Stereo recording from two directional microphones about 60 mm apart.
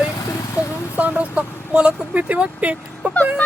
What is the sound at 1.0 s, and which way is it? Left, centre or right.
Speech, right.